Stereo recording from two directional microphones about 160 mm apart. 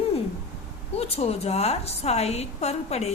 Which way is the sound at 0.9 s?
40° left (ahead or behind).